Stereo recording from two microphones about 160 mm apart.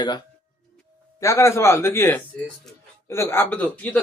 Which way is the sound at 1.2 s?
20° left (ahead or behind).